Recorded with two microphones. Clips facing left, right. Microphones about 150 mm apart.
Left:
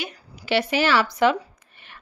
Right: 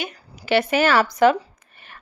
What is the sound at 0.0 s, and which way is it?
A woman's voice, 50° right (ahead or behind).